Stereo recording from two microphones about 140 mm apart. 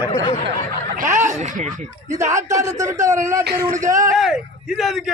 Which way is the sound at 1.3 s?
55° right (ahead or behind).